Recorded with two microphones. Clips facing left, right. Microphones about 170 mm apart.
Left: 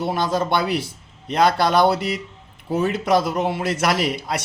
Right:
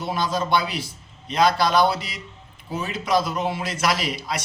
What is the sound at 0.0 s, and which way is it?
A man's voice, 65° left (ahead or behind).